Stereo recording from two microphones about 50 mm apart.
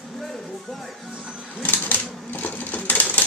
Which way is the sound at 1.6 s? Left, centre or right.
Left.